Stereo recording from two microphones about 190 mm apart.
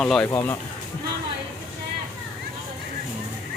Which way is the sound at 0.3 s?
15° left (ahead or behind).